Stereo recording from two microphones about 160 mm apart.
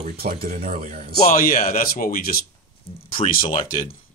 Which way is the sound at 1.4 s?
60° left (ahead or behind).